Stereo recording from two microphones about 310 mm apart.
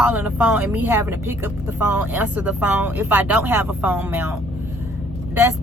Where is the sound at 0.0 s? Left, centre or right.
Centre.